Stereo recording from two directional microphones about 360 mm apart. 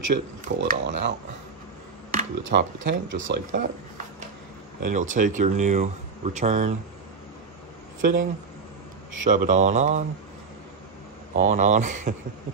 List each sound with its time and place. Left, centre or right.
0.1 s speech: right
2.1 s speech: right
4.8 s speech: right
8.0 s speech: right
11.3 s speech: centre